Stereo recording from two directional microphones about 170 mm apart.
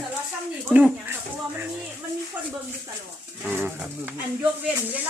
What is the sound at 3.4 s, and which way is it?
Speech, 10° right (ahead or behind).